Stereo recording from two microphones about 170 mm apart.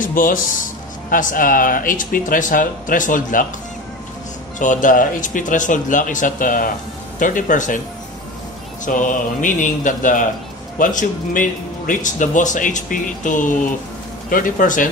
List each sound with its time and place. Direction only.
0.0 s speech: 55° left (ahead or behind)
4.6 s speech: 50° left (ahead or behind)
8.8 s speech: 50° left (ahead or behind)